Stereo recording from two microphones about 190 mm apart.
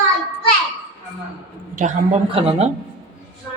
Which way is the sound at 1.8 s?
45° right (ahead or behind).